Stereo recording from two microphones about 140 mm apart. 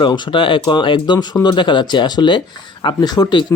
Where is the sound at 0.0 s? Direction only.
35° left (ahead or behind).